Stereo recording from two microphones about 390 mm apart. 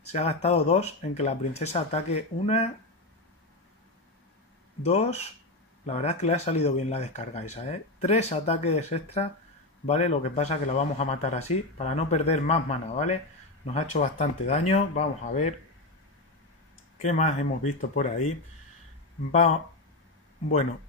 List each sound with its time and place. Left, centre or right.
0.1 s speech: centre
4.8 s speech: centre
17.0 s speech: centre